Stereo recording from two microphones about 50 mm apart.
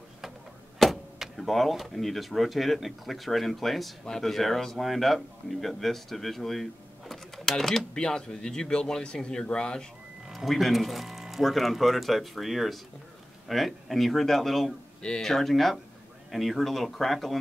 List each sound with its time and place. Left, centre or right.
0.7 s speech: centre
10.3 s speech: centre
15.0 s speech: centre
15.2 s speech: centre